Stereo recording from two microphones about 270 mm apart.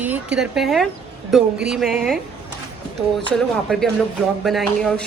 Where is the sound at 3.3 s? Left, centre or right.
Centre.